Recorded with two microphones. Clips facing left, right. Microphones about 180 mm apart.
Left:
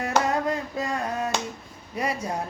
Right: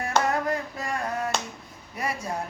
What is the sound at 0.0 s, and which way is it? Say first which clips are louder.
Hands: left 1 dB; 25° left (ahead or behind).